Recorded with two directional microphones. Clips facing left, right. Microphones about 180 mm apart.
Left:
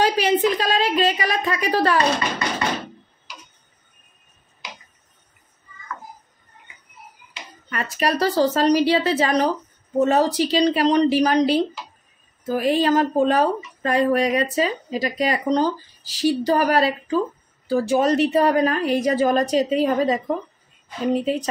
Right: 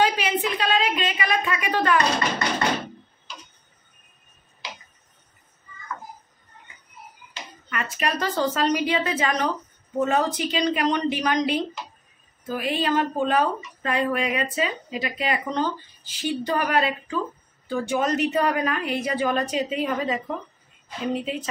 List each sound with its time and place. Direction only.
0.0 s a sound: 40° left (ahead or behind)
0.6 s a woman's voice: 40° left (ahead or behind)
7.7 s speech: 35° left (ahead or behind)